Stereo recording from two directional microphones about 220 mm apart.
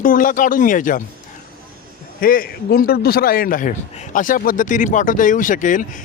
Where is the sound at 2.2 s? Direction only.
40° left (ahead or behind).